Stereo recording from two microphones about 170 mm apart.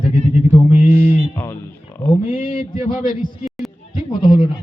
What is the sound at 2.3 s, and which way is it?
A man's voice, 55° left (ahead or behind).